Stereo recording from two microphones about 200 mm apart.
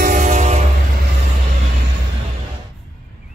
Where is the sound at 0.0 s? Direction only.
40° right (ahead or behind).